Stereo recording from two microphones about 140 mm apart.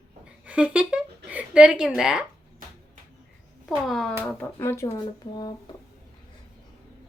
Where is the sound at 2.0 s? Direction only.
5° right (ahead or behind).